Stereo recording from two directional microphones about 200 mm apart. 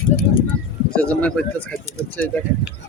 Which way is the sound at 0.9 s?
5° left (ahead or behind).